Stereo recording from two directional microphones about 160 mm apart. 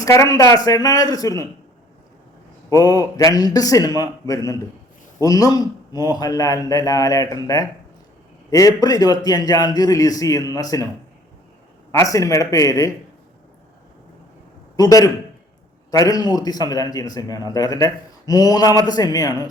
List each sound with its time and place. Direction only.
0.0 s a man's voice: 20° left (ahead or behind)
2.6 s a man's voice: 20° left (ahead or behind)
11.9 s a man's voice: 20° left (ahead or behind)
14.8 s a man's voice: 20° left (ahead or behind)